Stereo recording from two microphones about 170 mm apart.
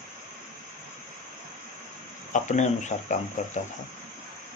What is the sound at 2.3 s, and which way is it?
Speech, 45° left (ahead or behind).